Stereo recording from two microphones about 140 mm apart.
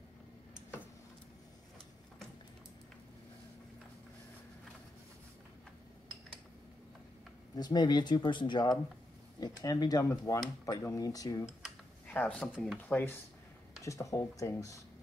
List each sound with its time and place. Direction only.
7.5 s speech: 30° left (ahead or behind)
12.1 s speech: 10° left (ahead or behind)